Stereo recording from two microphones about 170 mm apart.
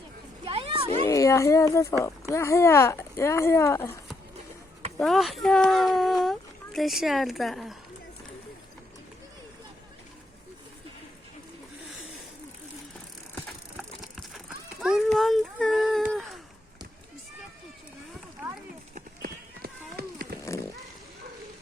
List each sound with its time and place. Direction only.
0.4 s a sound: 30° right (ahead or behind)
1.0 s speech: 20° left (ahead or behind)
4.9 s speech: centre (ahead or behind)
13.3 s horse: centre (ahead or behind)
18.9 s run: 60° right (ahead or behind)